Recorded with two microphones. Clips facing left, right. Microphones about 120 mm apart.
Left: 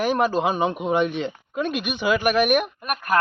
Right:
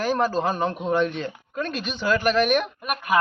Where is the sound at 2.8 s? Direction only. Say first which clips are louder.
Even; centre (ahead or behind).